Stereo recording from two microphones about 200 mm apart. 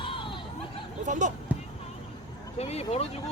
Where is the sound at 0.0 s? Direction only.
25° left (ahead or behind).